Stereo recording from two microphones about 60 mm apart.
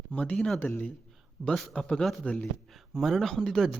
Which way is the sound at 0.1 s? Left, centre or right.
Left.